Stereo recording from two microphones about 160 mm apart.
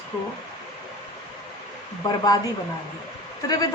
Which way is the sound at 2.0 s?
25° left (ahead or behind).